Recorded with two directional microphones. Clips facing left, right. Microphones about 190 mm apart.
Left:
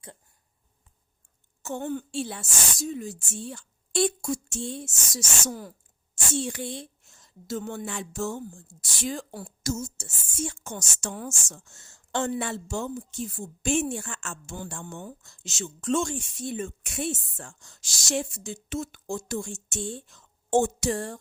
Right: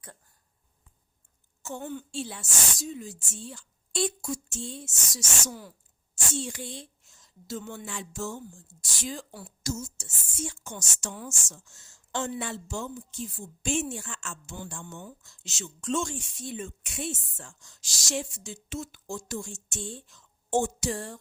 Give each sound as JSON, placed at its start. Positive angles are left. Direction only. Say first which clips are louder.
{"t": 1.6, "sound": "a woman's voice", "louder": "left 5 dB", "side_deg": 55}
{"t": 6.3, "sound": "a woman's voice", "louder": "left 5 dB", "side_deg": 65}
{"t": 14.7, "sound": "a woman's voice", "louder": "left 3 dB", "side_deg": 60}